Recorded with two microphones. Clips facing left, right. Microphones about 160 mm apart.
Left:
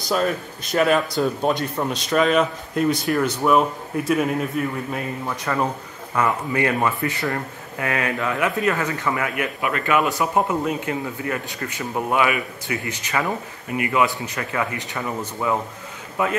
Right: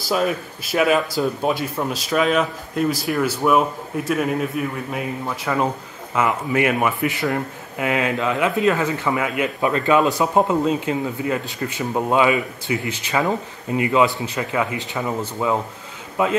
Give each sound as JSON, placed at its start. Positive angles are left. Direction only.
{"t": 0.0, "sound": "speech", "side_deg": -5}